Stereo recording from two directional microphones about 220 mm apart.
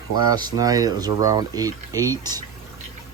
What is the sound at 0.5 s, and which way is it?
Speech, 15° right (ahead or behind).